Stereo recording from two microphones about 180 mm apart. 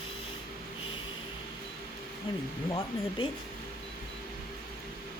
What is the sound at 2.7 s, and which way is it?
Speech, 25° left (ahead or behind).